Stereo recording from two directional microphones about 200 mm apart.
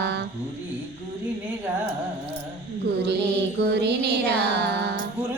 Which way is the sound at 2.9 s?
55° right (ahead or behind).